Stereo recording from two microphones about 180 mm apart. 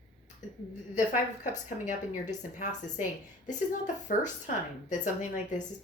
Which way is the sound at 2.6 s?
40° left (ahead or behind).